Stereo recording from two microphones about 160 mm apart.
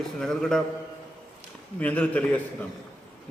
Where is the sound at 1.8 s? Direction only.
10° left (ahead or behind).